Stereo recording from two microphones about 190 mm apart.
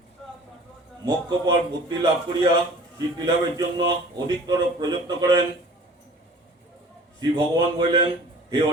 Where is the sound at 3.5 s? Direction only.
20° right (ahead or behind).